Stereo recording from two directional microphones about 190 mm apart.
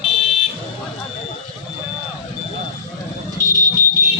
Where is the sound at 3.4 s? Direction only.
40° left (ahead or behind).